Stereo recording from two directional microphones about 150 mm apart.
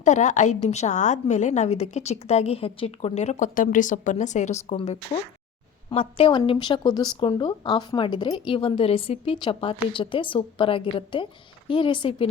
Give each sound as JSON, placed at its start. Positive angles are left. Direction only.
{"t": 0.0, "sound": "a woman's voice", "side_deg": 55}
{"t": 4.8, "sound": "a woman's voice", "side_deg": 40}